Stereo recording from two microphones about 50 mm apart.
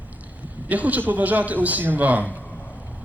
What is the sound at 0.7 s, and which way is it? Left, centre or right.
A man's voice, right.